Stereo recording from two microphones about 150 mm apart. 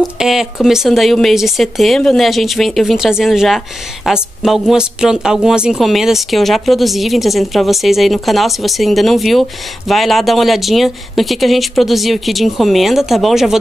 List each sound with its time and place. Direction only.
0.0 s speech: centre (ahead or behind)